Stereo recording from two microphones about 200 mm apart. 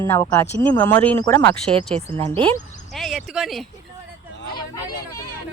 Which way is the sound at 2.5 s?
Centre (ahead or behind).